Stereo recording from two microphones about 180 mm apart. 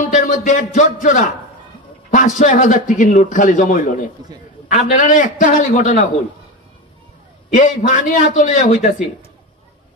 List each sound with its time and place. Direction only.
0.0 s a sound: 45° left (ahead or behind)
0.5 s a man's voice: 45° left (ahead or behind)
7.5 s a man's voice: 45° left (ahead or behind)